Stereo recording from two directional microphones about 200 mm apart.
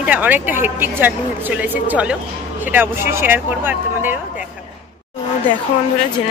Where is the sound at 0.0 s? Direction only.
5° right (ahead or behind).